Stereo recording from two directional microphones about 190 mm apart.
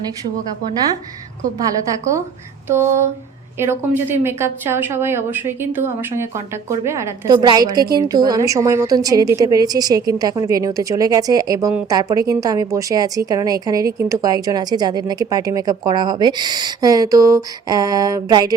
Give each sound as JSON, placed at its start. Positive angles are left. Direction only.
{"t": 1.9, "sound": "a woman's voice", "side_deg": -15}